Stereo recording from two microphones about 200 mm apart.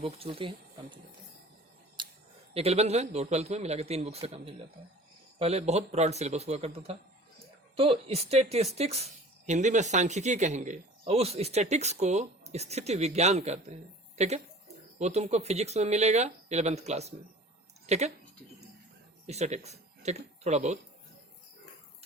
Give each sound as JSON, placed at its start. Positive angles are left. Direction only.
{"t": 0.0, "sound": "speech", "side_deg": -30}
{"t": 2.0, "sound": "scissors", "side_deg": -25}
{"t": 2.5, "sound": "speech", "side_deg": -30}
{"t": 19.3, "sound": "speech", "side_deg": -35}